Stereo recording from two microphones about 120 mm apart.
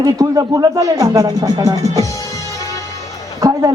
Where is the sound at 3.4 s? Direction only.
30° right (ahead or behind).